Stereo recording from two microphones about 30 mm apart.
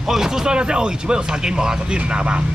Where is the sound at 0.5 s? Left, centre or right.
Right.